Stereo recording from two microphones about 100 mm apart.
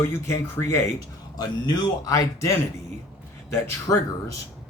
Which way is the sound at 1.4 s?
45° left (ahead or behind).